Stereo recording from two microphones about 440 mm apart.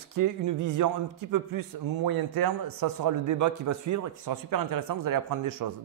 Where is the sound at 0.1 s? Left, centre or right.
Right.